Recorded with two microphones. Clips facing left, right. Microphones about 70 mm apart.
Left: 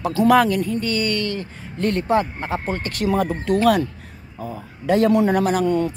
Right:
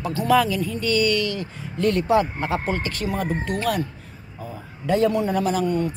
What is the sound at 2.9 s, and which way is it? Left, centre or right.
Speech, left.